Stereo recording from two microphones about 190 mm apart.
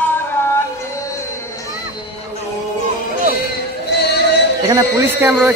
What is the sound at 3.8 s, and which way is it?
Music, 60° left (ahead or behind).